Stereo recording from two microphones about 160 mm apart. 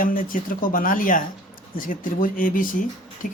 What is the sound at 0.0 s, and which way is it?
Speech, 60° left (ahead or behind).